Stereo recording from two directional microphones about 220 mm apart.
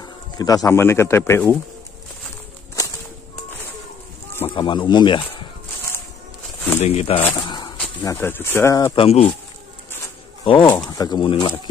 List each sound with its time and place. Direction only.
0.0 s speech: 15° left (ahead or behind)
4.6 s speech: 20° left (ahead or behind)
6.8 s speech: 30° left (ahead or behind)
7.4 s a sound: 20° left (ahead or behind)
8.0 s speech: 10° left (ahead or behind)
8.9 s speech: 25° left (ahead or behind)
10.4 s speech: 25° left (ahead or behind)